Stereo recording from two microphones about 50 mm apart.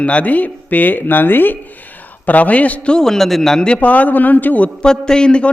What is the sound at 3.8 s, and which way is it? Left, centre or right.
Speech, left.